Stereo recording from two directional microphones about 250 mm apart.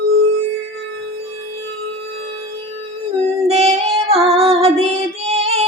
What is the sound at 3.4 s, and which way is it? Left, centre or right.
Female singing, right.